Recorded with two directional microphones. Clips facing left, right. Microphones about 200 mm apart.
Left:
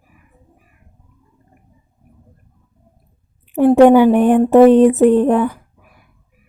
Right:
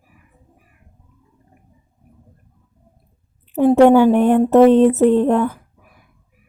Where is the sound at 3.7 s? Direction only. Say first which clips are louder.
Left 2 dB; 15° left (ahead or behind).